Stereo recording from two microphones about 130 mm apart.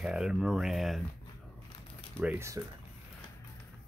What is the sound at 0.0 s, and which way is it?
Speech, 5° right (ahead or behind).